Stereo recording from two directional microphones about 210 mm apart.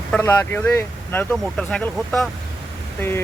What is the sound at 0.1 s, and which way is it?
Speech, 10° left (ahead or behind).